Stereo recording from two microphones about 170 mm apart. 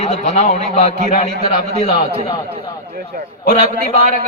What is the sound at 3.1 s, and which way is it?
Speech, 60° right (ahead or behind).